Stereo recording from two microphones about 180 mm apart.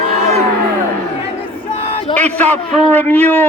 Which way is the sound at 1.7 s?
30° left (ahead or behind).